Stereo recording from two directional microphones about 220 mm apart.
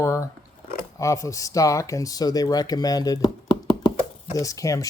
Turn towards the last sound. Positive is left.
turn(degrees=15)  # may be behind; listen again after turning